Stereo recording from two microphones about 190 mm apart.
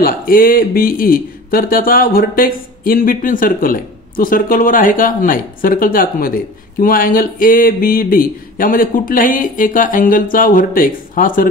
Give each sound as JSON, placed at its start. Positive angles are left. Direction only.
{"t": 0.0, "sound": "speech", "side_deg": 50}